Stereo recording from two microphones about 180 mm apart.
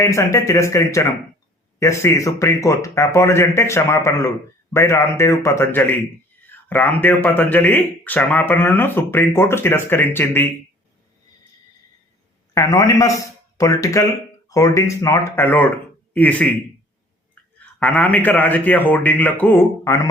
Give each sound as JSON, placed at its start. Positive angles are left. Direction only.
{"t": 0.0, "sound": "speech", "side_deg": 15}
{"t": 12.5, "sound": "speech", "side_deg": 15}
{"t": 17.4, "sound": "a sound", "side_deg": 10}
{"t": 17.7, "sound": "speech", "side_deg": 10}